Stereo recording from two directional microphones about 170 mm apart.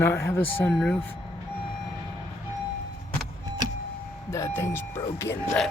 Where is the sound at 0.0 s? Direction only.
15° left (ahead or behind).